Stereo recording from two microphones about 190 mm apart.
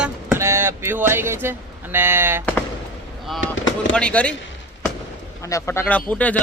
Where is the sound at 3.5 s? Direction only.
80° left.